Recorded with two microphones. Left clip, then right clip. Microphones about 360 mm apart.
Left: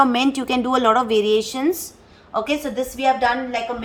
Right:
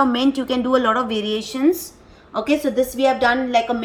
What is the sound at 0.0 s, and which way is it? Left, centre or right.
A woman's voice, left.